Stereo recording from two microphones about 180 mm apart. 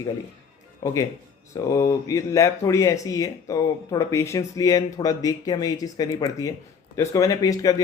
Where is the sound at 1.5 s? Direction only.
20° left (ahead or behind).